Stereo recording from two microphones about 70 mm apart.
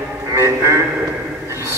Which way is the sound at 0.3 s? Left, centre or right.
Right.